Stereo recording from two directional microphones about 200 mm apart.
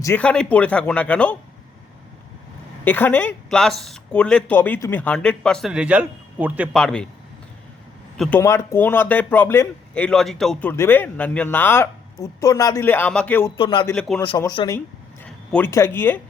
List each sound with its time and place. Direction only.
0.0 s speech: 10° left (ahead or behind)
2.8 s speech: 10° left (ahead or behind); by 6.7 s 10° right (ahead or behind)
6.7 s speech: 5° left (ahead or behind)
8.1 s a man's voice: 5° left (ahead or behind)
13.6 s speech: 20° left (ahead or behind)